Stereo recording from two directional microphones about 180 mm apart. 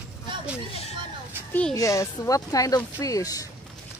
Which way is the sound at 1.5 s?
5° left (ahead or behind).